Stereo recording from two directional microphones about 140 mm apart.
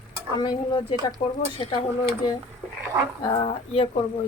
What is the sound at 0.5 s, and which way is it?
Speech, 40° left (ahead or behind).